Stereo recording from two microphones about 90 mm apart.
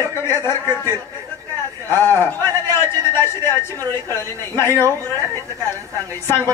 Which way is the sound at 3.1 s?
25° left (ahead or behind).